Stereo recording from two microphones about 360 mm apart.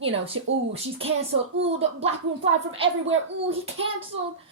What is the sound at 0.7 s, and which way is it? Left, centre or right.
Speech, centre.